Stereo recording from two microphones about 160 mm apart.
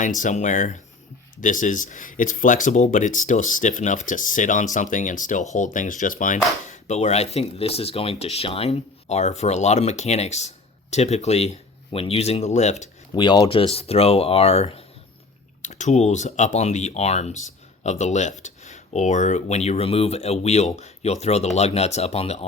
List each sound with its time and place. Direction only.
0.0 s speech: 50° left (ahead or behind)
13.1 s speech: 30° left (ahead or behind)